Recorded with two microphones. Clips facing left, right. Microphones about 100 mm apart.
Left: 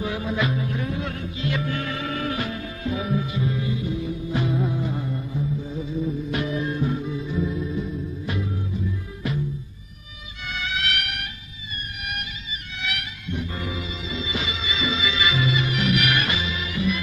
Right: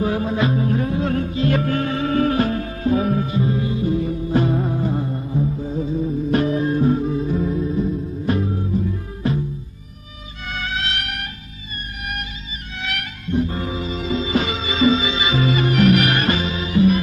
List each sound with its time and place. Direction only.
0.0 s music: 40° right (ahead or behind)
10.4 s music: 40° right (ahead or behind)
12.7 s music: 45° right (ahead or behind)
15.0 s music: 30° right (ahead or behind)
15.4 s music: 45° right (ahead or behind)